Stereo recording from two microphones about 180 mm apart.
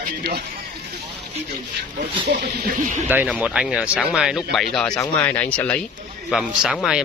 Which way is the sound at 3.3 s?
5° right (ahead or behind).